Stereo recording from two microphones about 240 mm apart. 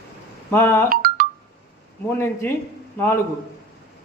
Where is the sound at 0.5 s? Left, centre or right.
Centre.